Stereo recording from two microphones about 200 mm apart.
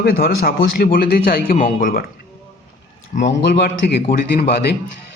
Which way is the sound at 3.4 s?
55° left (ahead or behind).